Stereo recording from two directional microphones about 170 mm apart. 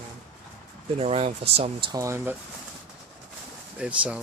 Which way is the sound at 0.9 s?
35° right (ahead or behind).